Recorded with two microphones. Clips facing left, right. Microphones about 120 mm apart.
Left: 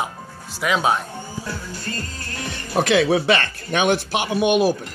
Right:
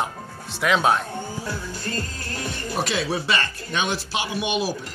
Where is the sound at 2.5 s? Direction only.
55° left (ahead or behind).